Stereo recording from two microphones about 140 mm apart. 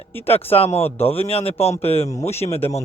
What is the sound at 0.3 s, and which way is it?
A man's voice, 45° left (ahead or behind).